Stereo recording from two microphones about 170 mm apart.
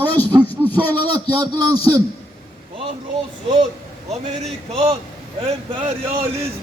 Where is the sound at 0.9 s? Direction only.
25° right (ahead or behind).